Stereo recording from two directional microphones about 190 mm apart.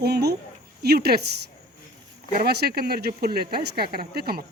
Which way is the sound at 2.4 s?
55° right (ahead or behind).